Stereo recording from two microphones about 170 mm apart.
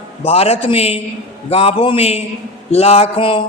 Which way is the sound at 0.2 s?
35° left (ahead or behind).